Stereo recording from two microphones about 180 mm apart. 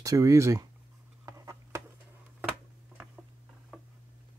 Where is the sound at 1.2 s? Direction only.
15° right (ahead or behind).